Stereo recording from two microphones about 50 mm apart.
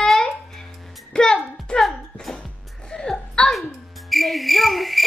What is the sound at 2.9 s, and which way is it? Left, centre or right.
Whimper, centre.